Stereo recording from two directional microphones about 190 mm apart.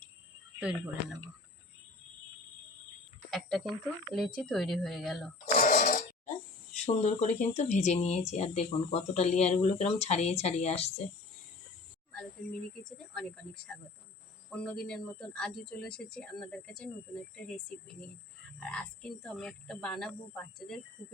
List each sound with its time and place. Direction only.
0.6 s speech: 5° right (ahead or behind)
3.2 s speech: centre (ahead or behind)
5.5 s a sound: 45° left (ahead or behind)
6.8 s speech: 35° left (ahead or behind)
13.1 s speech: 5° left (ahead or behind)
18.6 s speech: 5° left (ahead or behind)